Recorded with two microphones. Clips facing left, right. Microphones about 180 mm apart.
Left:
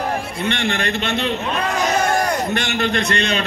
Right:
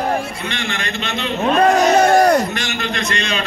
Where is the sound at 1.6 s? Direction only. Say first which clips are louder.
Right 9 dB; 45° right (ahead or behind).